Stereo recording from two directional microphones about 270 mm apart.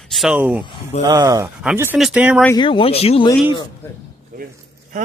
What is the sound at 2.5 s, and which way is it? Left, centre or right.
Speech, centre.